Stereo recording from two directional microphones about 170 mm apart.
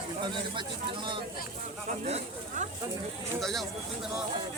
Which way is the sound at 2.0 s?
40° right (ahead or behind).